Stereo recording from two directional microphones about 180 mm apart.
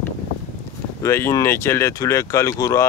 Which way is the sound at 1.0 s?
15° left (ahead or behind).